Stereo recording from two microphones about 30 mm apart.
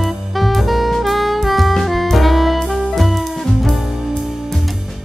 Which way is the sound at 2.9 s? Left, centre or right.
Centre.